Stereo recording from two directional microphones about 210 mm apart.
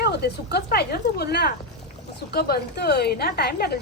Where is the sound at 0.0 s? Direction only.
50° left (ahead or behind).